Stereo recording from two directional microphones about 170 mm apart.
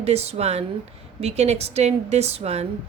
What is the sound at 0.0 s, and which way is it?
Speech, 40° right (ahead or behind).